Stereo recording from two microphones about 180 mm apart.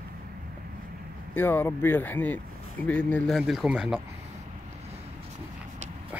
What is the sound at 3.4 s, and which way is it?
Speech, 5° right (ahead or behind).